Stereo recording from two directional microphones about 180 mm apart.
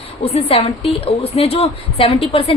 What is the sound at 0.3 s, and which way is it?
A woman's voice, 35° left (ahead or behind).